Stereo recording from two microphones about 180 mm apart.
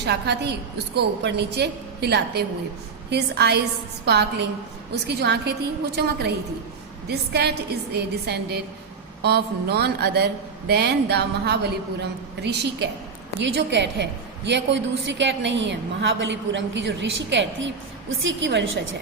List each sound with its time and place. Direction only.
0.0 s a woman's voice: 70° right (ahead or behind); by 18.7 s 85° right